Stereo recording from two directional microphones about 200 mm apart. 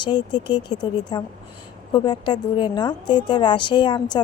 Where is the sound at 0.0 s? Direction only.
20° left (ahead or behind).